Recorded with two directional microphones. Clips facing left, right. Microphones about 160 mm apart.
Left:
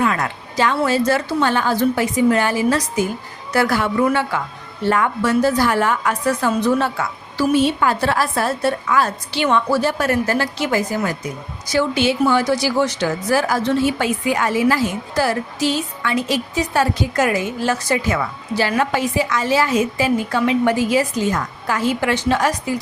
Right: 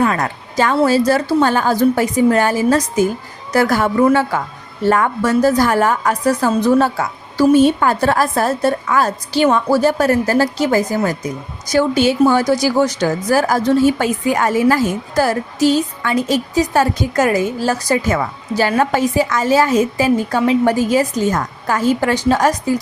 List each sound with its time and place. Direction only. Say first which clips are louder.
0.0 s a woman's voice: right 3 dB; 40° right (ahead or behind)
0.8 s a woman's voice: right 6 dB; 35° right (ahead or behind)